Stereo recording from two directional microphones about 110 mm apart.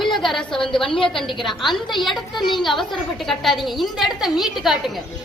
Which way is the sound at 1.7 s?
45° left (ahead or behind).